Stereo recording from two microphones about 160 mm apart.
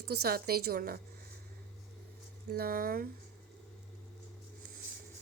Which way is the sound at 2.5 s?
70° right (ahead or behind).